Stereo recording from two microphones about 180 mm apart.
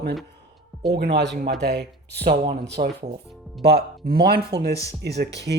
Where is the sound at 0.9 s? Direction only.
65° right (ahead or behind).